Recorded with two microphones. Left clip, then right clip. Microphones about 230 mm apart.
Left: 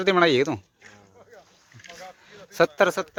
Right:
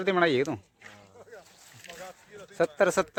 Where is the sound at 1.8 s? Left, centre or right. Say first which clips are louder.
Left 2 dB; right.